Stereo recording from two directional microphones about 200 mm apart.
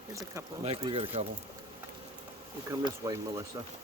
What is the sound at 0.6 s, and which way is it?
Speech, 30° right (ahead or behind).